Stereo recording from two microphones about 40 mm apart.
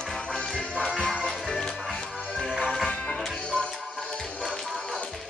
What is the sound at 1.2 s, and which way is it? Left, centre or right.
Music, centre.